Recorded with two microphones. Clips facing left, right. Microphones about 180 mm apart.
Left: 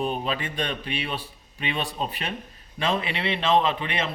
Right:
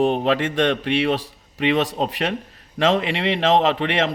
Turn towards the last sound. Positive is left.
turn(degrees=-85)